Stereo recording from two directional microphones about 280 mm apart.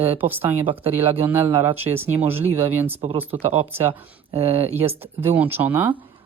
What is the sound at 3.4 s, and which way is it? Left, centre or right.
Speech, right.